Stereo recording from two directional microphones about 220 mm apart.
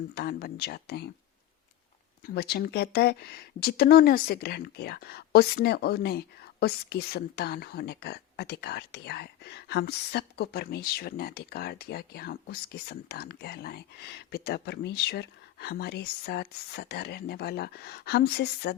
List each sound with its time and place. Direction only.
0.1 s speech: 45° left (ahead or behind)
2.2 s speech: 45° left (ahead or behind)